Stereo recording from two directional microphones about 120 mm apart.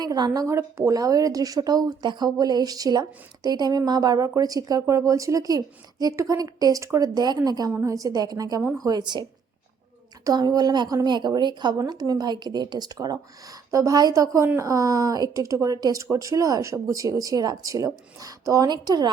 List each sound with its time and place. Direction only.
0.0 s a woman's voice: 30° right (ahead or behind)
10.2 s a woman's voice: 35° right (ahead or behind)